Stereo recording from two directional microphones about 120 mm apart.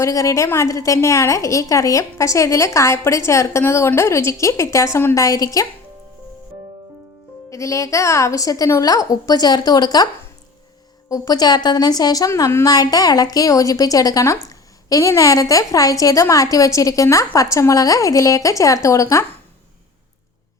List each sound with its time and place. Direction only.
0.0 s a woman's voice: 25° left (ahead or behind)
7.5 s a woman's voice: 25° left (ahead or behind)
11.1 s a woman's voice: 35° left (ahead or behind)